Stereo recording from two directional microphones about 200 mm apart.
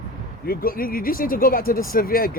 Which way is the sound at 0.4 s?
45° left (ahead or behind).